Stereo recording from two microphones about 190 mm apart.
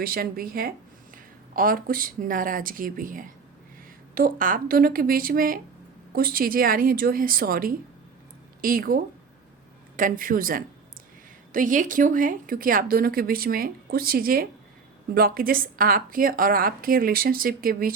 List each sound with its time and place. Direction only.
0.0 s speech: 50° right (ahead or behind)
10.0 s speech: 45° right (ahead or behind)